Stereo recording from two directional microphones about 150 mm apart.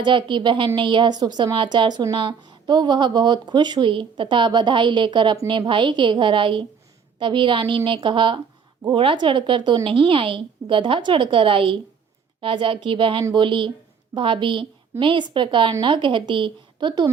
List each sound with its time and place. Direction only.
0.0 s speech: 30° right (ahead or behind)